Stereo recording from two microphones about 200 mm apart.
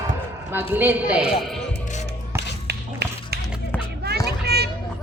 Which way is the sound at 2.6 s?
55° right (ahead or behind).